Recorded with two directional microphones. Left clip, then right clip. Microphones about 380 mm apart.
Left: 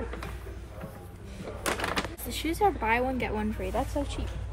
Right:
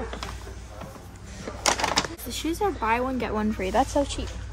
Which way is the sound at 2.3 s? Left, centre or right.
Centre.